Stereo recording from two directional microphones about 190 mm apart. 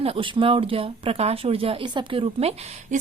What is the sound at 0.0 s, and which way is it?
A woman's voice, 30° right (ahead or behind).